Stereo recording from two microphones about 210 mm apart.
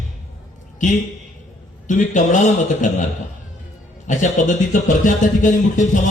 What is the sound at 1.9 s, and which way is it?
Speech, 35° left (ahead or behind).